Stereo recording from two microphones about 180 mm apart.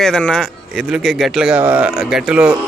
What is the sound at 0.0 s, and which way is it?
Speech, 5° left (ahead or behind).